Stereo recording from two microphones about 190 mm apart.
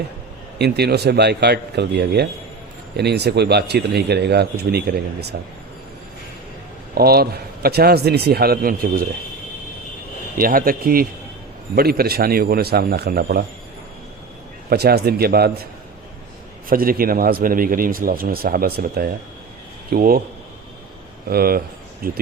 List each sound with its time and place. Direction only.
0.6 s speech: 60° right (ahead or behind)
6.9 s speech: 55° right (ahead or behind)
10.3 s speech: 50° right (ahead or behind)
14.7 s speech: 55° right (ahead or behind)
16.6 s speech: 50° right (ahead or behind)
21.2 s speech: 50° right (ahead or behind)